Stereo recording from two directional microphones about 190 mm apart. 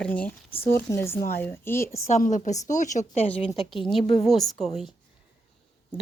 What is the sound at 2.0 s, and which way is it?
A woman's voice, 40° left (ahead or behind).